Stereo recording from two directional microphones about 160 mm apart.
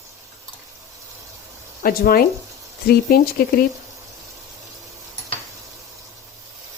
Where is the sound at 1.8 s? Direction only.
65° left (ahead or behind).